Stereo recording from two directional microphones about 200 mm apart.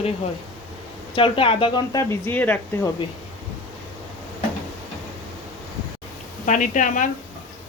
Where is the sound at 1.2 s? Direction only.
25° left (ahead or behind).